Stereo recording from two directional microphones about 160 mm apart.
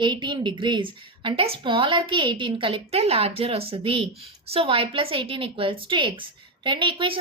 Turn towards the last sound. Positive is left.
turn(degrees=-35)  # may be behind; listen again after turning